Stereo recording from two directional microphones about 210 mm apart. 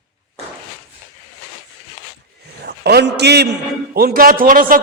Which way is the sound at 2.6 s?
50° right (ahead or behind).